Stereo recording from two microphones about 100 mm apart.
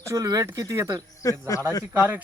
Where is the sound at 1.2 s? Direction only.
35° left (ahead or behind).